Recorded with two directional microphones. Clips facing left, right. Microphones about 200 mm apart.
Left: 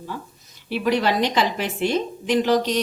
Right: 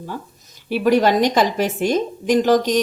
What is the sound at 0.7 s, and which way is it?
A woman's voice, 45° right (ahead or behind).